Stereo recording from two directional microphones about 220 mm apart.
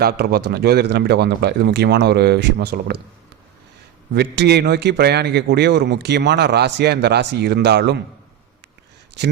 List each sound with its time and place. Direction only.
0.0 s a man's voice: 45° right (ahead or behind)
4.1 s a man's voice: 50° right (ahead or behind)